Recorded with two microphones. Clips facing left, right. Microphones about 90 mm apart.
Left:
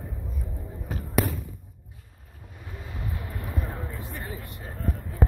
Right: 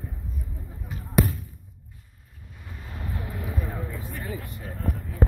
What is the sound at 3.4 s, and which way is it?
Vehicle, centre (ahead or behind).